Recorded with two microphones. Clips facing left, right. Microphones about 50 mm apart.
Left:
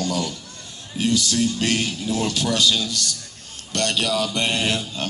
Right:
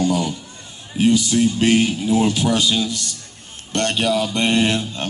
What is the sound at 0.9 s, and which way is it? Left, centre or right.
A man's voice, right.